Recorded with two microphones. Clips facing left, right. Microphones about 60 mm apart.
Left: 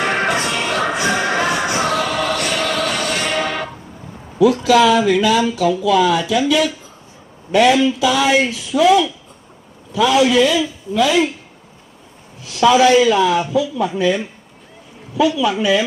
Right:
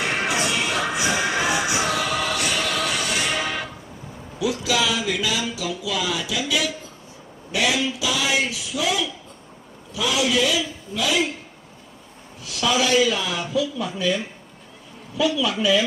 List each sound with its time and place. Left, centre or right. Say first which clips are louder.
0.0 s music: left 5 dB; left
4.4 s speech: left 11 dB; left
12.5 s speech: left 9 dB; left